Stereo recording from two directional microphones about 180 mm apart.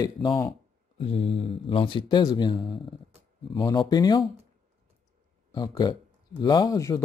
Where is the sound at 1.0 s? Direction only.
30° left (ahead or behind).